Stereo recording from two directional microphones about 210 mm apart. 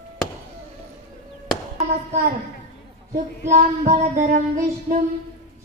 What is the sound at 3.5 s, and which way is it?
Child singing, 35° right (ahead or behind).